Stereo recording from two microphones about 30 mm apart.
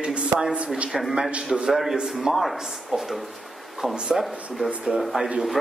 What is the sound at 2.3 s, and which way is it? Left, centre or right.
Speech, centre.